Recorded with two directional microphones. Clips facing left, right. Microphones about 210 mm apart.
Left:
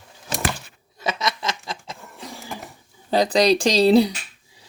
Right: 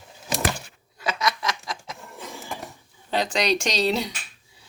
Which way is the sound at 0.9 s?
25° left (ahead or behind).